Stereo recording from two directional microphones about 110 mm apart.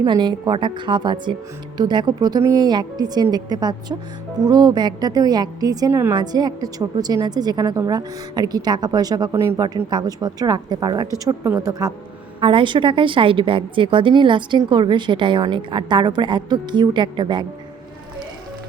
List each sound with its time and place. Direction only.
0.0 s a woman's voice: 40° right (ahead or behind)
5.9 s a woman's voice: 20° right (ahead or behind)
6.1 s a woman's voice: 40° right (ahead or behind)
9.3 s a woman's voice: 25° right (ahead or behind)
9.6 s a woman's voice: 40° right (ahead or behind)
11.4 s a woman's voice: 25° right (ahead or behind)
12.4 s a woman's voice: 50° right (ahead or behind)